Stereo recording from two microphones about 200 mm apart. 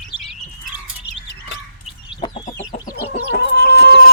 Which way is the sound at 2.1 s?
20° left (ahead or behind).